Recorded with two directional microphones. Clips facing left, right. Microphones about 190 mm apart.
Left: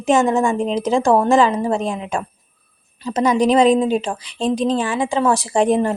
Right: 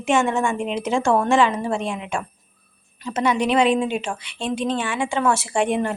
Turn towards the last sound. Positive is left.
turn(degrees=35)  # may be behind; listen again after turning